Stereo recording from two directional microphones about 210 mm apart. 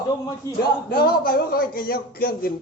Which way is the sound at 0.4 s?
15° left (ahead or behind).